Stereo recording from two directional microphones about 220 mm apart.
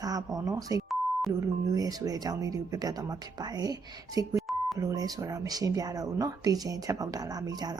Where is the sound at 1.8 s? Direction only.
15° right (ahead or behind).